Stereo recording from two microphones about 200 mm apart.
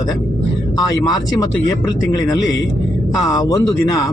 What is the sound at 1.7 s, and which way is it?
A man's voice, 20° left (ahead or behind).